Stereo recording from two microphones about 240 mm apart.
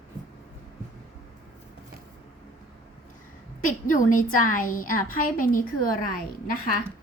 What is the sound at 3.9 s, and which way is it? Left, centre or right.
A woman's voice, left.